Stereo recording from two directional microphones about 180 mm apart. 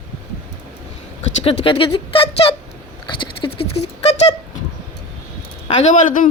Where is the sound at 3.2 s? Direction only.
30° left (ahead or behind).